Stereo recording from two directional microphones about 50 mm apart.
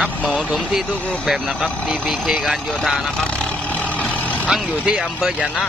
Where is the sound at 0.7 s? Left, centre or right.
Centre.